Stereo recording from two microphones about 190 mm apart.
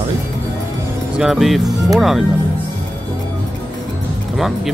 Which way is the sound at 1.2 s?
Centre (ahead or behind).